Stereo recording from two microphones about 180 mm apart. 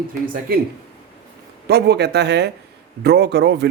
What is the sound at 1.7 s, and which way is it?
Speech, 65° right (ahead or behind).